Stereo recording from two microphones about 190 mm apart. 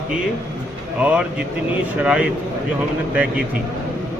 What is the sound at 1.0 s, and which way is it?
Speech, 5° right (ahead or behind).